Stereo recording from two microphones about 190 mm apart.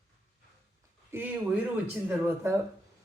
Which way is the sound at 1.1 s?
15° right (ahead or behind).